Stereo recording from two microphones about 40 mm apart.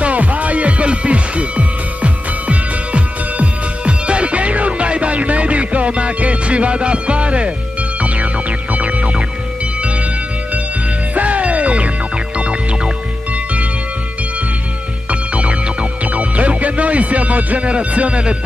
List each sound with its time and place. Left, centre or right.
0.0 s music: right
11.1 s music: right
15.0 s music: right